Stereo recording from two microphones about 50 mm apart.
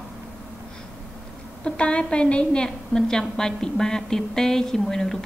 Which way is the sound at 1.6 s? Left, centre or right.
Left.